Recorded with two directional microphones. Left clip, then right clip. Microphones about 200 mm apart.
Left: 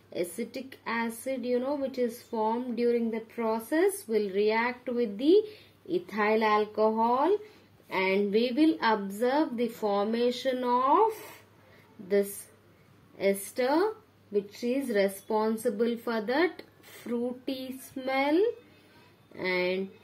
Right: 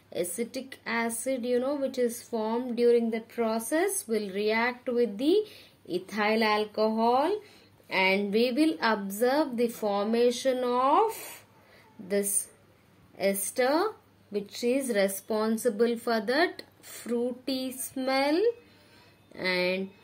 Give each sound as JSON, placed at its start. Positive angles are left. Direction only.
{"t": 0.1, "sound": "speech", "side_deg": -20}
{"t": 13.2, "sound": "speech", "side_deg": -25}
{"t": 19.3, "sound": "speech", "side_deg": -20}